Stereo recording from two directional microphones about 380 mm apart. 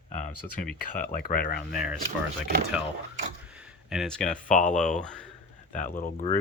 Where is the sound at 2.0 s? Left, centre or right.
Right.